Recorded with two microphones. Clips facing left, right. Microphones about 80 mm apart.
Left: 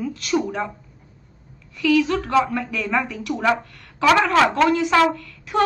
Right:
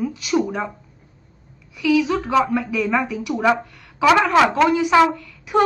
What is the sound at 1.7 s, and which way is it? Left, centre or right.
A woman's voice, centre.